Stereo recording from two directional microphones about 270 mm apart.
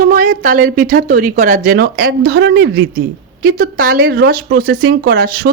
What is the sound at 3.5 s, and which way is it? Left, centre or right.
A woman's voice, right.